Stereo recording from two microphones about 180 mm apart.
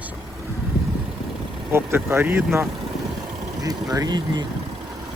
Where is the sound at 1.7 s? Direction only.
15° right (ahead or behind).